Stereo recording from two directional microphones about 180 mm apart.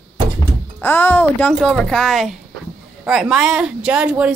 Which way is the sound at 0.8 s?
10° left (ahead or behind).